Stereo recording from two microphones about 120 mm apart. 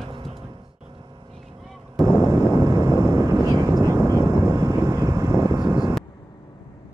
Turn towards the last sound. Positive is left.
turn(degrees=-35)  # may be behind; listen again after turning